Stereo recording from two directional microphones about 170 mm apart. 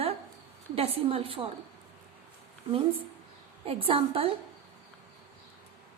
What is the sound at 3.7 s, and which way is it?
Speech, 35° right (ahead or behind).